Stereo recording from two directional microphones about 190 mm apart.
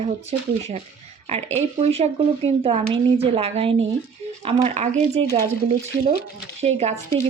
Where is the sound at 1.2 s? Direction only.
35° right (ahead or behind).